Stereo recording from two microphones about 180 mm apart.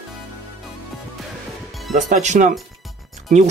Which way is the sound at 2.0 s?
40° right (ahead or behind).